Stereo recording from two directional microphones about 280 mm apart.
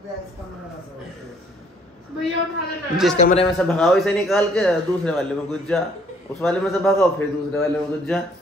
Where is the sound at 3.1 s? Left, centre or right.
Left.